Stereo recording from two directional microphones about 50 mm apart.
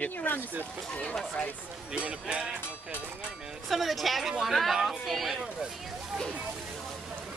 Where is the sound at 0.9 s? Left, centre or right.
Left.